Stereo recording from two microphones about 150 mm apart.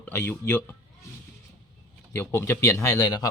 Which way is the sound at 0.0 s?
15° left (ahead or behind).